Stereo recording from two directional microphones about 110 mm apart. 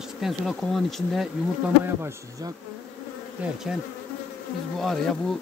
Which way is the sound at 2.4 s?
35° right (ahead or behind).